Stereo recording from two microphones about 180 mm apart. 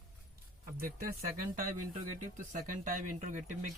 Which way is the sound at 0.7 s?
55° right (ahead or behind).